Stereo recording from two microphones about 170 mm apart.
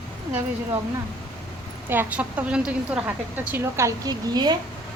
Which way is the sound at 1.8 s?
10° right (ahead or behind).